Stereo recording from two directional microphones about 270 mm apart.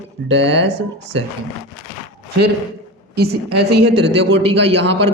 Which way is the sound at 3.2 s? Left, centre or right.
Right.